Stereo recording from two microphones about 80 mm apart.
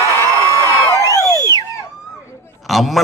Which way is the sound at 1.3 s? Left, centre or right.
Left.